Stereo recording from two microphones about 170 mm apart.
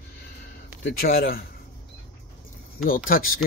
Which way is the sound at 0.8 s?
70° left (ahead or behind).